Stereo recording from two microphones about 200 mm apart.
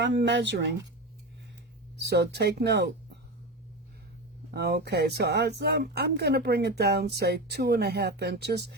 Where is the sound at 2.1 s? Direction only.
55° right (ahead or behind).